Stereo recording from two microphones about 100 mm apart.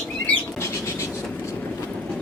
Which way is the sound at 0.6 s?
25° left (ahead or behind).